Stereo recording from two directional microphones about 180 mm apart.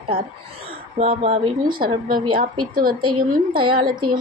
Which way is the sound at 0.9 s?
35° right (ahead or behind).